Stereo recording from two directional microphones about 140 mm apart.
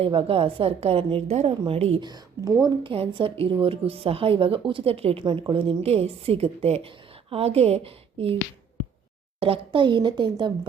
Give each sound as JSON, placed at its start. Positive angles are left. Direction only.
{"t": 0.0, "sound": "a woman's voice", "side_deg": -40}
{"t": 2.0, "sound": "a woman's voice", "side_deg": -25}
{"t": 2.9, "sound": "a woman's voice", "side_deg": -40}
{"t": 9.4, "sound": "a woman's voice", "side_deg": -40}